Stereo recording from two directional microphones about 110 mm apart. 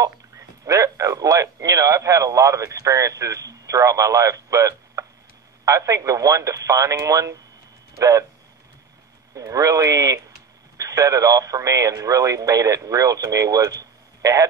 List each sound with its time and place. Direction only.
0.0 s speech: 30° right (ahead or behind)
9.3 s speech: 30° right (ahead or behind)